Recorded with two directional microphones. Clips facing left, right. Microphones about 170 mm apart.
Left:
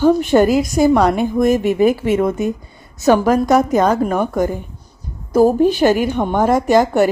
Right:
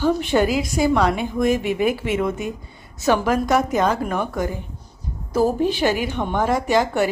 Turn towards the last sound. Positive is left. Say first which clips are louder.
# left 6 dB
turn(degrees=40)  # may be behind; listen again after turning